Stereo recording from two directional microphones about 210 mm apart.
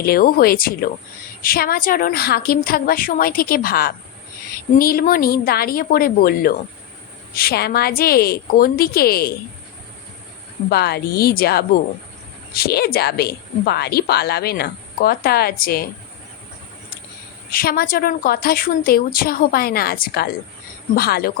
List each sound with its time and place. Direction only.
0.0 s a woman's voice: 45° left (ahead or behind)
10.7 s a woman's voice: 50° left (ahead or behind)
17.5 s a woman's voice: 45° left (ahead or behind)